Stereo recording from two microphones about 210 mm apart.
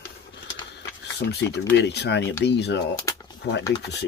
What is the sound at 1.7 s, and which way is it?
Speech, 55° left (ahead or behind).